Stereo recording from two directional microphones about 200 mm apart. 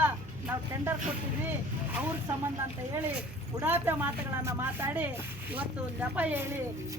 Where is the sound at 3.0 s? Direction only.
5° right (ahead or behind).